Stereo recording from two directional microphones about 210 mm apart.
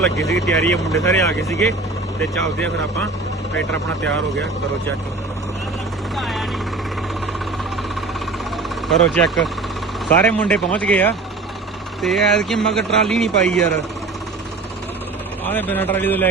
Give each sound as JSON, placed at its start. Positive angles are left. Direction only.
{"t": 0.0, "sound": "a man's voice", "side_deg": 5}
{"t": 1.0, "sound": "speech", "side_deg": 15}
{"t": 1.4, "sound": "a man's voice", "side_deg": 0}
{"t": 6.1, "sound": "helicopter", "side_deg": 0}
{"t": 8.9, "sound": "a man's voice", "side_deg": 0}
{"t": 15.4, "sound": "speech", "side_deg": 10}